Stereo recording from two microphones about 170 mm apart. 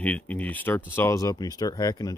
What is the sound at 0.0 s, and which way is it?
Speech, 10° left (ahead or behind).